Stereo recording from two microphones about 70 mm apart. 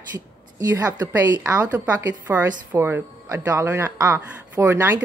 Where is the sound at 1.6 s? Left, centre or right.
Right.